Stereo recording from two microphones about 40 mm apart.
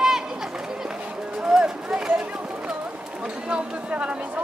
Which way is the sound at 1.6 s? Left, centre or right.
Right.